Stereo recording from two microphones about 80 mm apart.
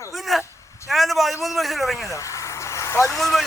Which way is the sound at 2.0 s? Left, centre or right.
Left.